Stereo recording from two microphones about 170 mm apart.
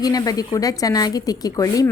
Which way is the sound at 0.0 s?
20° left (ahead or behind).